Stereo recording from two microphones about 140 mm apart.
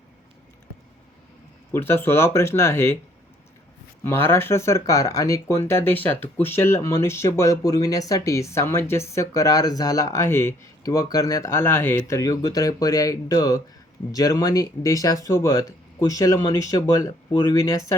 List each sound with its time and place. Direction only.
1.7 s speech: 15° left (ahead or behind)
4.0 s speech: 15° left (ahead or behind)